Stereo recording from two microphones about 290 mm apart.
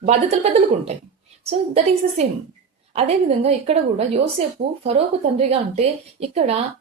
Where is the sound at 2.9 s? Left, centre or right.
Right.